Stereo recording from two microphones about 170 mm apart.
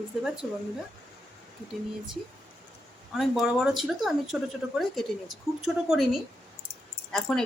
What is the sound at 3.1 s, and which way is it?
A woman's voice, 5° right (ahead or behind).